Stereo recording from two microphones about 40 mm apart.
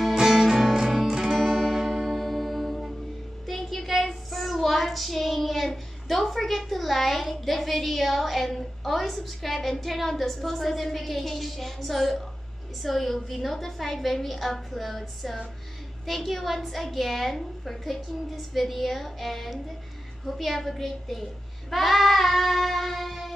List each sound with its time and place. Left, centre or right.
0.1 s music: centre
1.0 s music: centre
1.9 s music: centre
3.4 s a sound: centre
4.0 s a child's voice: centre